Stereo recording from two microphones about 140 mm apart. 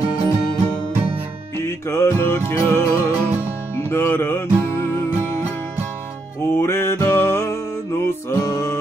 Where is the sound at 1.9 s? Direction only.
20° left (ahead or behind).